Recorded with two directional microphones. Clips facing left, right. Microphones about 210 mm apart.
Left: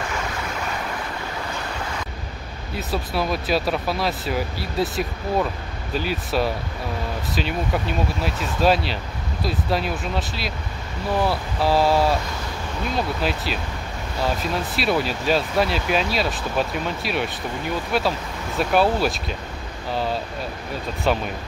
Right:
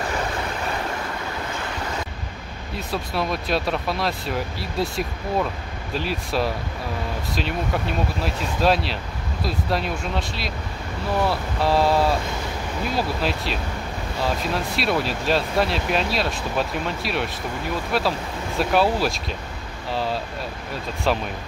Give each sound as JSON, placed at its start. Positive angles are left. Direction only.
{"t": 2.7, "sound": "speech", "side_deg": 0}